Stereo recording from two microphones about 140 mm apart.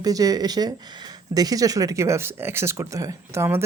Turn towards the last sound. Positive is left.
turn(degrees=-20)  # may be behind; listen again after turning